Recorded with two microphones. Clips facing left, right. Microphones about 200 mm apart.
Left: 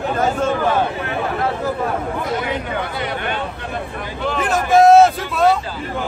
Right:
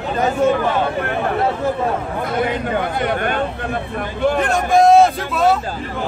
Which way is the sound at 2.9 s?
50° right (ahead or behind).